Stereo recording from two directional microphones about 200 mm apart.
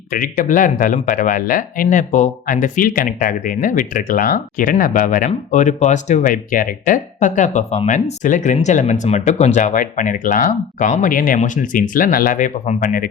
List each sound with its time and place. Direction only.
0.1 s speech: 45° left (ahead or behind)